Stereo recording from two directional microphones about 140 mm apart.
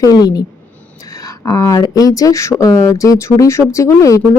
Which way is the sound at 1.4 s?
25° left (ahead or behind).